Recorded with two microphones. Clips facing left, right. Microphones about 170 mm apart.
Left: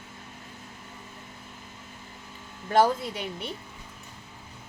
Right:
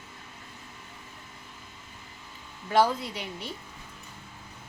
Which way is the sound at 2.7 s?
50° left (ahead or behind).